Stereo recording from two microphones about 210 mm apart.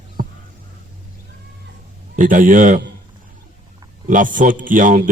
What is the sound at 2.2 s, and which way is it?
Speech, 40° right (ahead or behind).